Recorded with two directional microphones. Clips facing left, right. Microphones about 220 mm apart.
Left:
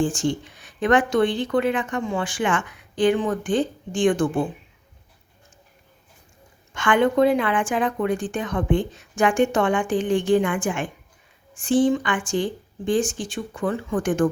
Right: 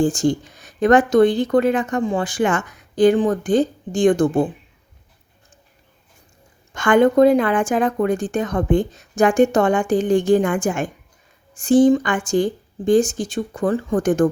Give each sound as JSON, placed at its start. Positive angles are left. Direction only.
{"t": 0.0, "sound": "speech", "side_deg": -40}
{"t": 6.7, "sound": "speech", "side_deg": -40}